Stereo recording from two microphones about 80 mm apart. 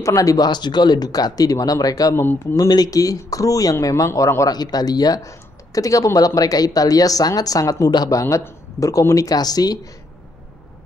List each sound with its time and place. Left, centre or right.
0.0 s speech: left
0.5 s speech: left
4.5 s a man's voice: left
8.2 s speech: left